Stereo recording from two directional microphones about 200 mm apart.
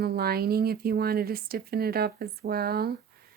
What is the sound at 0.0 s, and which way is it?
Speech, 50° right (ahead or behind).